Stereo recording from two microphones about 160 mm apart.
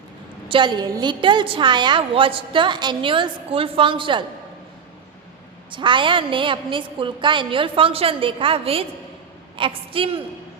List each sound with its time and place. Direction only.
0.4 s a woman's voice: 30° right (ahead or behind)
5.7 s a woman's voice: 30° right (ahead or behind)